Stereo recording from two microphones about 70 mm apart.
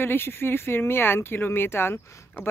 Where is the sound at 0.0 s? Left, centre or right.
Left.